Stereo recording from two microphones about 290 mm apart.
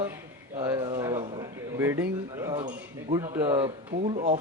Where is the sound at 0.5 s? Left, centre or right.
Centre.